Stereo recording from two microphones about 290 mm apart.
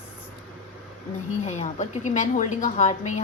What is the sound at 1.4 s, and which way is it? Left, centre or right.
A woman's voice, left.